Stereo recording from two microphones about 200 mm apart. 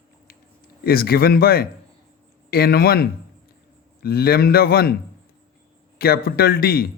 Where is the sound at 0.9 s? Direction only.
50° left (ahead or behind).